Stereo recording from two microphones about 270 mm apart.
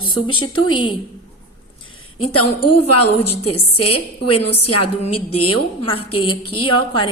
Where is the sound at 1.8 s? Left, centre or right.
Left.